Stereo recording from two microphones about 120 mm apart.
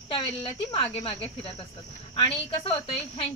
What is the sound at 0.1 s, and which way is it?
Speech, 50° left (ahead or behind).